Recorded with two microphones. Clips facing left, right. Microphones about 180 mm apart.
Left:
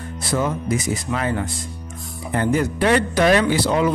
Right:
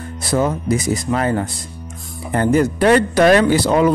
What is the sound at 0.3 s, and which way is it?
Speech, 40° right (ahead or behind).